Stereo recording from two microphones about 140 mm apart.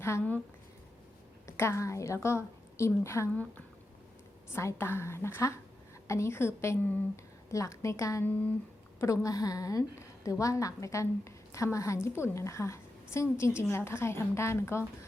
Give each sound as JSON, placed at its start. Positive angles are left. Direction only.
{"t": 0.0, "sound": "speech", "side_deg": 15}
{"t": 1.5, "sound": "a woman's voice", "side_deg": 20}
{"t": 4.5, "sound": "a woman's voice", "side_deg": 20}
{"t": 9.0, "sound": "a woman's voice", "side_deg": 25}